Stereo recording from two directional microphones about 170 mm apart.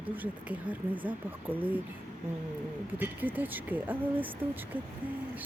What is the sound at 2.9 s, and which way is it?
Speech, 10° right (ahead or behind).